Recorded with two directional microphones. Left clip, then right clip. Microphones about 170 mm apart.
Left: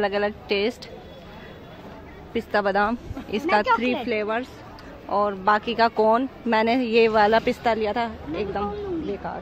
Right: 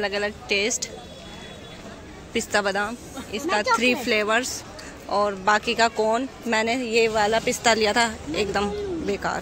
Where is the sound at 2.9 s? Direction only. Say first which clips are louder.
Left 4 dB; 35° left (ahead or behind).